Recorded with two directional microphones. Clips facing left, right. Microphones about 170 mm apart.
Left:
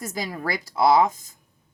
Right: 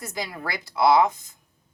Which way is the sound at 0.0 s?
45° left (ahead or behind).